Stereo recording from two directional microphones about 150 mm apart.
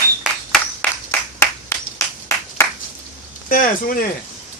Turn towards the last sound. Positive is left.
turn(degrees=70)  # may be behind; listen again after turning